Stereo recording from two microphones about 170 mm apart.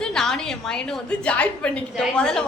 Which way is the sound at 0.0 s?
5° left (ahead or behind).